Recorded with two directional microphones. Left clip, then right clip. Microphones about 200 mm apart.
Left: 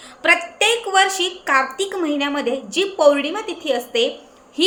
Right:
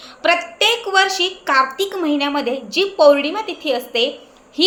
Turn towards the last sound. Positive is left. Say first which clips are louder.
# right 1 dB
turn(degrees=5)  # may be behind; listen again after turning